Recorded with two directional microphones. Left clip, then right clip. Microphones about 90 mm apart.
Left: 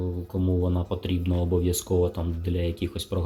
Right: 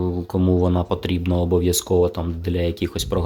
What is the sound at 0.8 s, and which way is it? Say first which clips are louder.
Speech: right 7 dB; 45° right (ahead or behind).